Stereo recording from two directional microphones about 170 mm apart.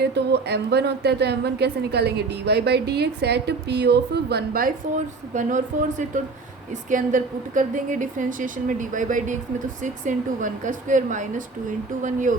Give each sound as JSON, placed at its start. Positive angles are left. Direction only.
{"t": 0.0, "sound": "a woman's voice", "side_deg": -75}